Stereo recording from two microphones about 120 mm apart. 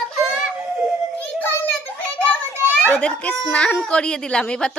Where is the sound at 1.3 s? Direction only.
15° left (ahead or behind).